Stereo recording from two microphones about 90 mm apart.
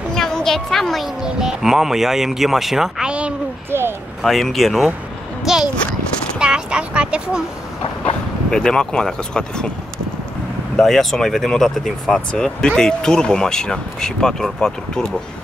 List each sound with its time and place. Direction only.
0.1 s speech: 5° left (ahead or behind); by 3.3 s 10° right (ahead or behind)
3.7 s a sound: 30° right (ahead or behind)
4.2 s a child's voice: centre (ahead or behind)
6.4 s a sound: 10° right (ahead or behind)
8.5 s speech: 10° left (ahead or behind)
10.8 s speech: 5° left (ahead or behind)